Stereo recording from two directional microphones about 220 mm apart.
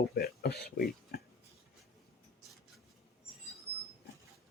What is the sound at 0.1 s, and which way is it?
Speech, 45° left (ahead or behind).